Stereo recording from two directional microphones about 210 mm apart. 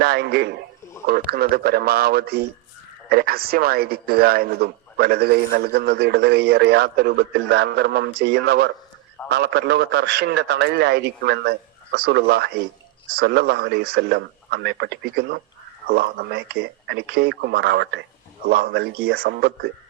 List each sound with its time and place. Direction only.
0.0 s a man's voice: 50° right (ahead or behind)